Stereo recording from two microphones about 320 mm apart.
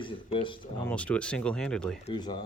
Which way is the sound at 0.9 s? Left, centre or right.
Centre.